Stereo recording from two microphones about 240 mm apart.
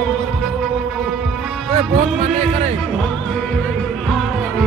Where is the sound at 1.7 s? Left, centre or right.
Right.